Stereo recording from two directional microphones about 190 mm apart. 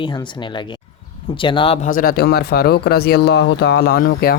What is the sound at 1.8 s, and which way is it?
Speech, 50° left (ahead or behind).